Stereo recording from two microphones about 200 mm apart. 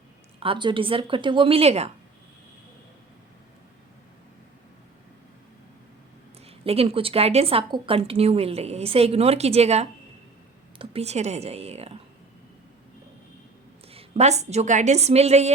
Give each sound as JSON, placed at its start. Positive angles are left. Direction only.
{"t": 0.3, "sound": "speech", "side_deg": -25}
{"t": 6.4, "sound": "a woman's voice", "side_deg": -30}
{"t": 13.9, "sound": "a woman's voice", "side_deg": -35}